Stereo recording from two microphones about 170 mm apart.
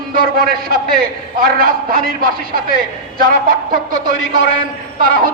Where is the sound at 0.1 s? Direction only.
60° right (ahead or behind).